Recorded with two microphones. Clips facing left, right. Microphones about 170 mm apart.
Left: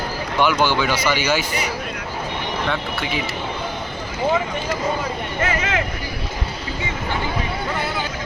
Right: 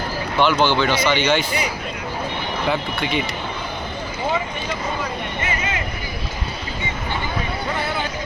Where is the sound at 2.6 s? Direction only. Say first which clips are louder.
Right 5 dB; centre (ahead or behind).